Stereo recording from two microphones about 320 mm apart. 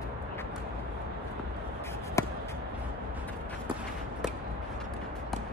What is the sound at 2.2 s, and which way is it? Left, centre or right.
Basketball bounce, centre.